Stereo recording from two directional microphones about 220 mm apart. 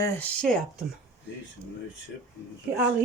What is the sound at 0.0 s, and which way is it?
Speech, 10° left (ahead or behind).